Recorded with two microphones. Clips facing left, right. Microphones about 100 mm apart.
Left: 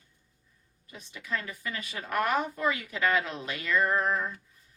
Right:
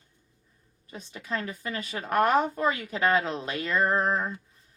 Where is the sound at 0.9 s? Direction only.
30° right (ahead or behind).